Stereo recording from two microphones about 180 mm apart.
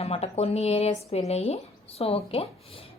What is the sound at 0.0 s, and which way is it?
A woman's voice, 35° left (ahead or behind).